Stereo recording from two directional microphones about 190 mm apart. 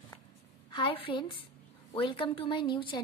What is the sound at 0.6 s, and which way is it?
A woman's voice, 25° left (ahead or behind).